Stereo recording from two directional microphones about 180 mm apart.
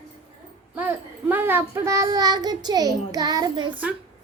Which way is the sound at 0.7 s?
10° right (ahead or behind).